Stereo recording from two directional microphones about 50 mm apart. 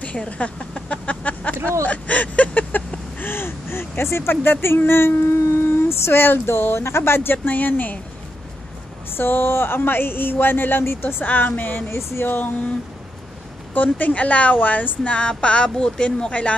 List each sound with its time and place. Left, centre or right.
0.0 s a sound: left
3.2 s gasp: left
4.3 s speech: left
9.1 s speech: left
10.8 s a woman's voice: left
11.9 s speech: left
12.3 s a woman's voice: left
13.7 s a woman's voice: left